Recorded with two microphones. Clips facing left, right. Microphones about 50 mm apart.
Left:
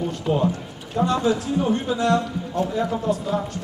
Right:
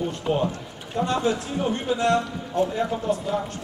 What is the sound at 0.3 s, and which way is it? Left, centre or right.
Speech, right.